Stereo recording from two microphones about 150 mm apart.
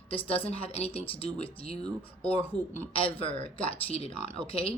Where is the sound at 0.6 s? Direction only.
40° left (ahead or behind).